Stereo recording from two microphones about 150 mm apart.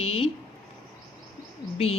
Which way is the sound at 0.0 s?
40° left (ahead or behind).